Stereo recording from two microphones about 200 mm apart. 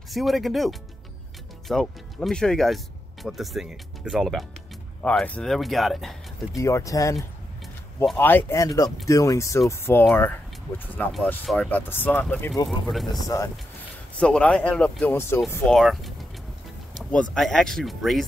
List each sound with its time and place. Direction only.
0.1 s speech: centre (ahead or behind)
6.6 s speech: 15° left (ahead or behind)
12.6 s speech: centre (ahead or behind)
14.2 s speech: 5° left (ahead or behind)